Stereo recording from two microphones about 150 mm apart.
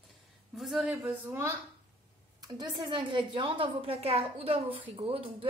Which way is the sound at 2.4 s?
30° right (ahead or behind).